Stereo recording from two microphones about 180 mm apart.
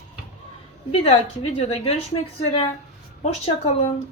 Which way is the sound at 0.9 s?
35° left (ahead or behind).